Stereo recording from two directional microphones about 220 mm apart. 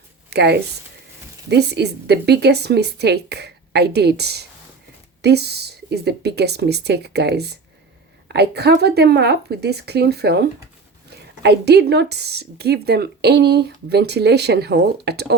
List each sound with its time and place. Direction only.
0.3 s speech: 50° right (ahead or behind)